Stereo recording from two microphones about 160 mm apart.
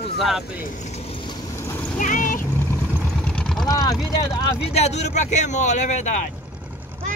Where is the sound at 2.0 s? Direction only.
55° left (ahead or behind).